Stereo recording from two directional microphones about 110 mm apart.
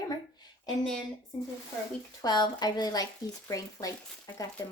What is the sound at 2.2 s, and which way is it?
Speech, 40° left (ahead or behind).